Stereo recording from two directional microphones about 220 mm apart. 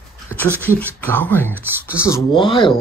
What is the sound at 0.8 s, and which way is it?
Speech, 10° left (ahead or behind).